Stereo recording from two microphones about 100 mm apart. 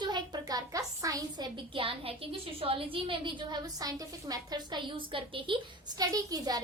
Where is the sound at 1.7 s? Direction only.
65° right (ahead or behind); by 4.8 s 40° right (ahead or behind).